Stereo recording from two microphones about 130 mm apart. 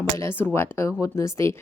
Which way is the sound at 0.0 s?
20° left (ahead or behind).